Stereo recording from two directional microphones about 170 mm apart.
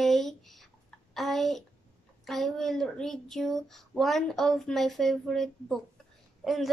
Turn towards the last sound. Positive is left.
turn(degrees=0)  # may be behind; listen again after turning